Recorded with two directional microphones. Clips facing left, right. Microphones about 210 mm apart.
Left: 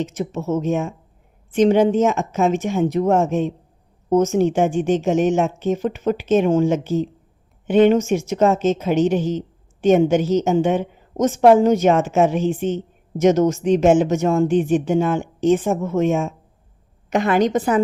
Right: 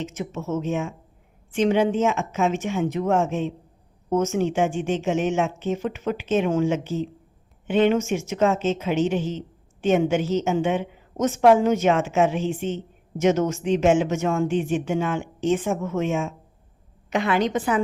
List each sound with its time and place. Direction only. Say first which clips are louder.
0.0 s a woman's voice: left 6 dB; 35° left (ahead or behind)